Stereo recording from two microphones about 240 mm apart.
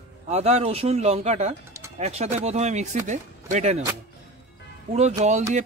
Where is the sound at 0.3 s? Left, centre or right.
Right.